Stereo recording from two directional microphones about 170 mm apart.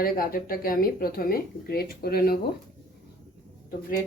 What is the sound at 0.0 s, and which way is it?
Speech, 60° left (ahead or behind).